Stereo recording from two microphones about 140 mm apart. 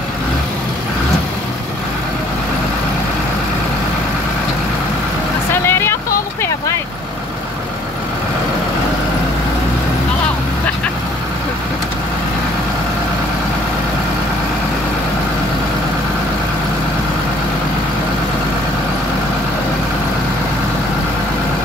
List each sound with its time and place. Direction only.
5.5 s vehicle: 15° left (ahead or behind)